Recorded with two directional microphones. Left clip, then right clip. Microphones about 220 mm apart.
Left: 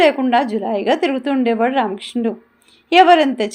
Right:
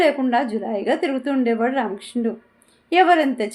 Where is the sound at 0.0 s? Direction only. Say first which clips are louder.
Left 4 dB; 30° left (ahead or behind).